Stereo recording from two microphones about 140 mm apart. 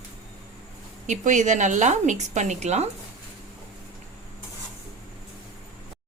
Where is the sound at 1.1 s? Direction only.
60° right (ahead or behind).